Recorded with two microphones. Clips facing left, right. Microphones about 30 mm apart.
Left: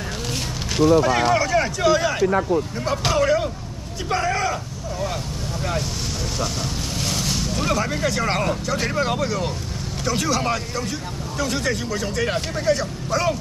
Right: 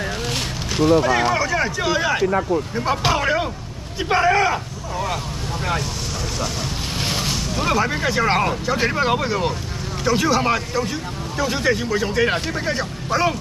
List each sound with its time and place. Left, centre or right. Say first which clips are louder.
1.0 s speech: even; centre; by 4.6 s right
7.0 s boat: right 2 dB; right
7.2 s speech: even; centre